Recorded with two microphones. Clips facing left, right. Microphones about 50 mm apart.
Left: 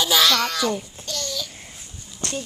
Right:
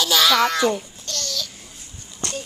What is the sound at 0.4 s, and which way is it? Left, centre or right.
Speech, centre.